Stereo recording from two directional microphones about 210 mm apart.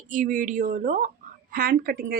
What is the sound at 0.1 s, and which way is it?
A woman's voice, 35° right (ahead or behind).